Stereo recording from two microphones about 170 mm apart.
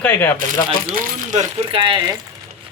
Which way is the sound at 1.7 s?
30° right (ahead or behind).